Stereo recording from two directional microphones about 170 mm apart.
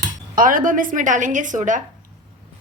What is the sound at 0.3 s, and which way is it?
A woman's voice, 55° right (ahead or behind).